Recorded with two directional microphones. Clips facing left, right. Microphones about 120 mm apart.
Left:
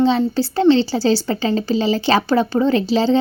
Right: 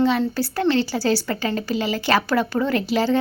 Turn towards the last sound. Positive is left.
turn(degrees=25)  # may be behind; listen again after turning